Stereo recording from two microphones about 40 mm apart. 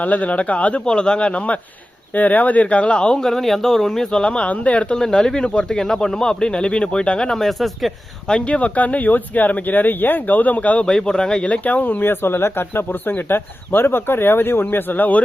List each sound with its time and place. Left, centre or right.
0.0 s speech: left
0.9 s speech: left
1.3 s speech: left
2.1 s speech: left
3.2 s speech: centre
4.1 s speech: left
4.4 s speech: left
7.3 s speech: centre
8.3 s speech: left
10.8 s speech: left
12.0 s speech: left
14.6 s speech: left